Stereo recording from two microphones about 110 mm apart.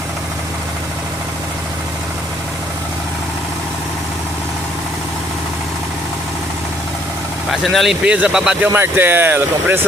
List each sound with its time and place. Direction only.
7.5 s speech: centre (ahead or behind)
8.7 s speech: 20° right (ahead or behind)